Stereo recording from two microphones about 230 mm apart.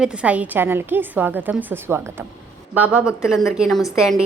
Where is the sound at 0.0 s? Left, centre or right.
Centre.